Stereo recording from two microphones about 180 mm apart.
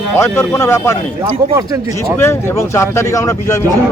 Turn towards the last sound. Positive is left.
turn(degrees=15)  # may be behind; listen again after turning